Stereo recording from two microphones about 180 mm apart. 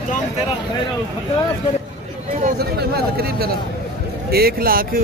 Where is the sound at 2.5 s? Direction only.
60° right (ahead or behind).